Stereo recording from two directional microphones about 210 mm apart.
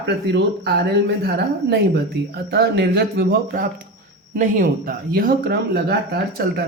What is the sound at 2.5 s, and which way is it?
Speech, 55° right (ahead or behind).